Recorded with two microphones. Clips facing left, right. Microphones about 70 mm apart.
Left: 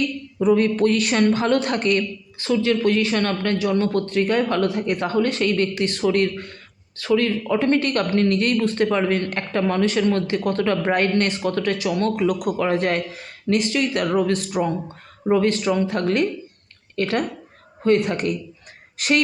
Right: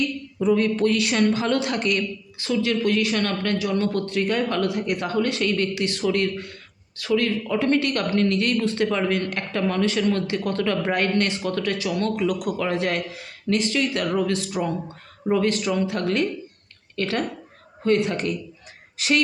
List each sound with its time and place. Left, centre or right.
0.3 s a woman's voice: left